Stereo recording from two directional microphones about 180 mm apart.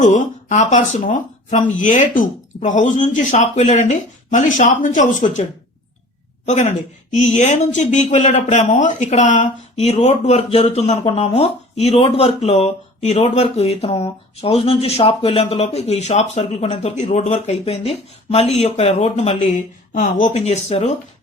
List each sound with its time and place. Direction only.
0.0 s speech: 45° left (ahead or behind)